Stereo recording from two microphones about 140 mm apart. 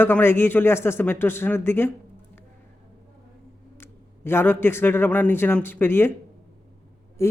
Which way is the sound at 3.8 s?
15° left (ahead or behind).